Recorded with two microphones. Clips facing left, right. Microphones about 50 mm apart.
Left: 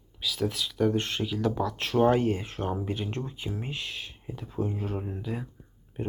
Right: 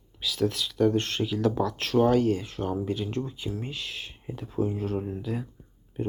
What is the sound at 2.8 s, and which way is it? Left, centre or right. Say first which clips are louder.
Speech: right 3 dB; centre.